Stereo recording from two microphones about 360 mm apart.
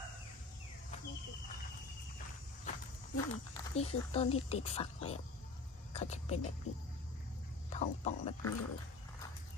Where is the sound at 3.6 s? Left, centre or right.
Centre.